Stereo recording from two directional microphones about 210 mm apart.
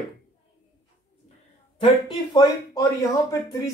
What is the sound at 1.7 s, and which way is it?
Speech, 20° left (ahead or behind).